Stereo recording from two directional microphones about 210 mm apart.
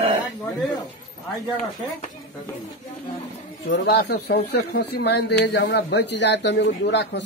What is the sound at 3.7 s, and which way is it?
Speech, 50° left (ahead or behind).